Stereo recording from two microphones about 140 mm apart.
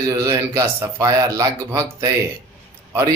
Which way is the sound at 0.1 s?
25° right (ahead or behind).